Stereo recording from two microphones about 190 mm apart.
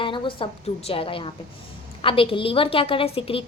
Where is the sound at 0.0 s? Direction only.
25° left (ahead or behind).